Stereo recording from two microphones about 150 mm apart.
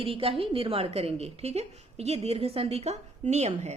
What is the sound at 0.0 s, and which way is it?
Speech, 40° right (ahead or behind).